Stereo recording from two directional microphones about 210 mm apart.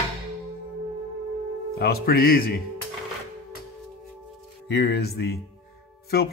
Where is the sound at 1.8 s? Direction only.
50° left (ahead or behind).